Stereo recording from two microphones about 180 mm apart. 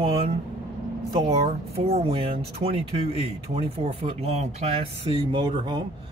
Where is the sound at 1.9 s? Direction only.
30° right (ahead or behind).